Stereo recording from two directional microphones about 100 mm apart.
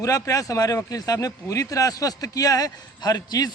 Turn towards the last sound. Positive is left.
turn(degrees=40)  # may be behind; listen again after turning